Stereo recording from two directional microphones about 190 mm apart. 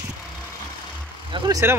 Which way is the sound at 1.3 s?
20° right (ahead or behind).